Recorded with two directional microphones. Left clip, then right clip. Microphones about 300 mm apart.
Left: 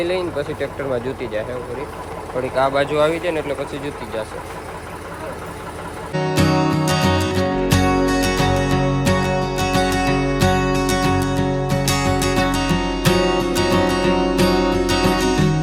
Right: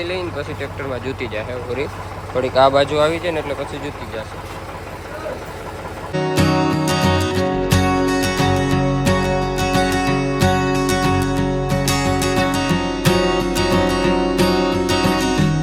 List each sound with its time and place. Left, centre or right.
0.0 s speech: centre
6.1 s music: centre